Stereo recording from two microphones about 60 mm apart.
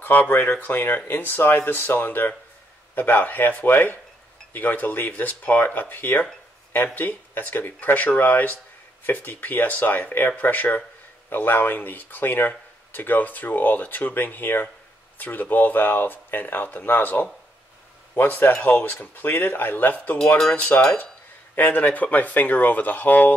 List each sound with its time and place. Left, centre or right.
0.0 s speech: left